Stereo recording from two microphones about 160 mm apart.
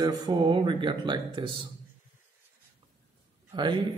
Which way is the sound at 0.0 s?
25° right (ahead or behind).